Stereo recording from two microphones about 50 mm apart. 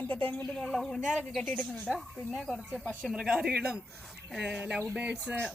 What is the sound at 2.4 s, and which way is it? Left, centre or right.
Speech, centre.